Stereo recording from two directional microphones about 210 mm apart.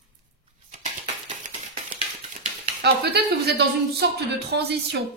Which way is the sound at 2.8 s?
50° right (ahead or behind).